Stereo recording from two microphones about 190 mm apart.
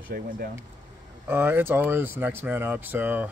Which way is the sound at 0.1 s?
50° right (ahead or behind).